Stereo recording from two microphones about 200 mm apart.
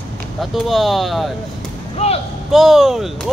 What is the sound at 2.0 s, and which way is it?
Speech, 30° left (ahead or behind).